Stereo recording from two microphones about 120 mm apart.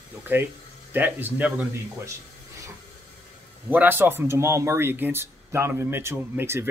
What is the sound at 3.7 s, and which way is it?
Speech, 15° right (ahead or behind).